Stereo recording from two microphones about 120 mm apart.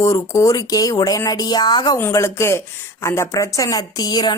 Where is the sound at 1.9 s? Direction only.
20° left (ahead or behind).